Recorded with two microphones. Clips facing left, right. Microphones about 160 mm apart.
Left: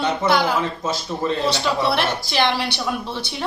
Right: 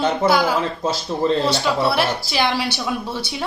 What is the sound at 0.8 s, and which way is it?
Speech, 30° right (ahead or behind).